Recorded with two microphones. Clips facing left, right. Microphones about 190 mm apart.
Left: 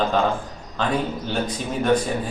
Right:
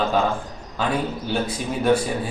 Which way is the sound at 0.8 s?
5° right (ahead or behind).